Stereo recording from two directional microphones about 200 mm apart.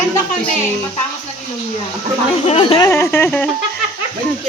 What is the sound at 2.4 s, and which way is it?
Speech, 30° left (ahead or behind).